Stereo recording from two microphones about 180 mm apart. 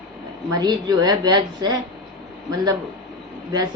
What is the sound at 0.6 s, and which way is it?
Speech, 25° right (ahead or behind).